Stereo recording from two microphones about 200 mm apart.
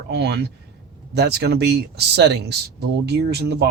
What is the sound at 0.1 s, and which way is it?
Speech, 55° right (ahead or behind).